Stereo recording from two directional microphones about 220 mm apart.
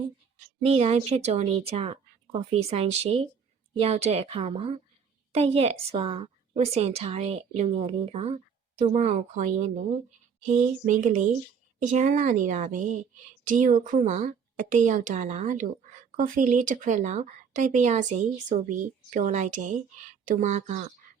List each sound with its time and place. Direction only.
0.6 s a woman's voice: 25° right (ahead or behind)